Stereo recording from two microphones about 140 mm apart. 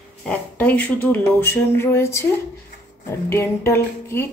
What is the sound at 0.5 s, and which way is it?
Speech, 10° left (ahead or behind).